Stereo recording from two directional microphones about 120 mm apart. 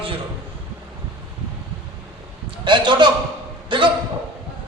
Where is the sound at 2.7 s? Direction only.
40° right (ahead or behind).